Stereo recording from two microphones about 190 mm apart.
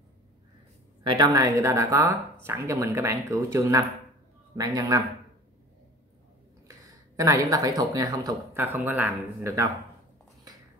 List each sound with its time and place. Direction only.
1.0 s speech: 20° right (ahead or behind)
7.2 s speech: 15° right (ahead or behind)